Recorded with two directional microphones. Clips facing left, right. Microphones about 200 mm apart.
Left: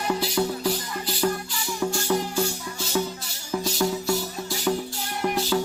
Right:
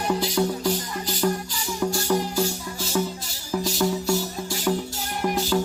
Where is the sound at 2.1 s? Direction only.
Centre (ahead or behind).